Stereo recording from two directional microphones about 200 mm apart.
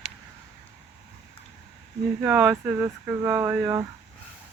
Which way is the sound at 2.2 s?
5° right (ahead or behind).